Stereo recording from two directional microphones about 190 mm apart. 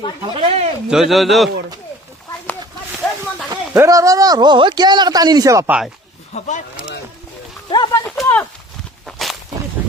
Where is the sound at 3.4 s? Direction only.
20° right (ahead or behind).